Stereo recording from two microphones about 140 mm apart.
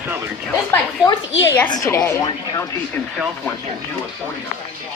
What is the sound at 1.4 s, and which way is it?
Speech, 15° left (ahead or behind).